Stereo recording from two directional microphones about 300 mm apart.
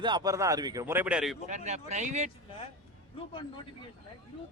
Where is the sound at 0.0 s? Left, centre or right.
Centre.